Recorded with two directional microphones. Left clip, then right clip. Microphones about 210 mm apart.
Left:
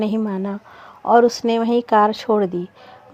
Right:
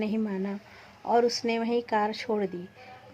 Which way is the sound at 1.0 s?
25° left (ahead or behind).